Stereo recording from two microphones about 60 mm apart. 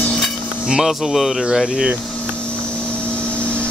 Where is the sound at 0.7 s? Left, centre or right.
Centre.